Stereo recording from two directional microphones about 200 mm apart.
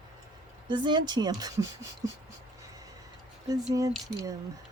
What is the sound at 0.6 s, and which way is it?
Speech, 20° right (ahead or behind).